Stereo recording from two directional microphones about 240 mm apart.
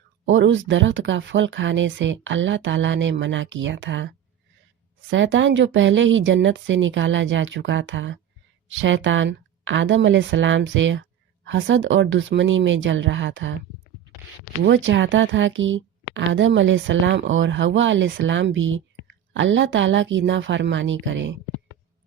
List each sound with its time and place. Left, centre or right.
0.3 s speech: right
5.1 s speech: right
14.6 s speech: right